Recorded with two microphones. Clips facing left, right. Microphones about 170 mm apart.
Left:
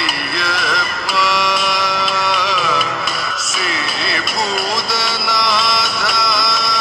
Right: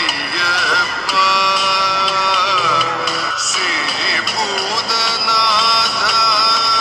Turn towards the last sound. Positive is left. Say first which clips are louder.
# even
turn(degrees=50)  # may be behind; listen again after turning